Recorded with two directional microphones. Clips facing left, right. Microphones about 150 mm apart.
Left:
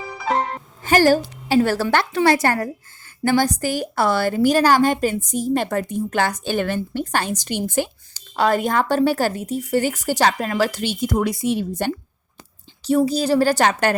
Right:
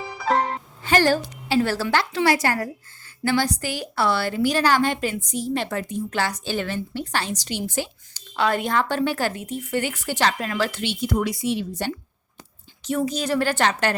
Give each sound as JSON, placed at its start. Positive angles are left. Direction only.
{"t": 0.3, "sound": "music", "side_deg": 0}
{"t": 0.8, "sound": "a woman's voice", "side_deg": 40}
{"t": 8.4, "sound": "speech", "side_deg": 40}
{"t": 12.8, "sound": "speech", "side_deg": 35}